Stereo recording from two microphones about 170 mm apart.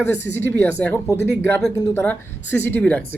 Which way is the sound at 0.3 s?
15° left (ahead or behind).